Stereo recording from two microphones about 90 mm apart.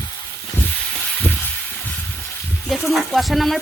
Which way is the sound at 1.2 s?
20° left (ahead or behind).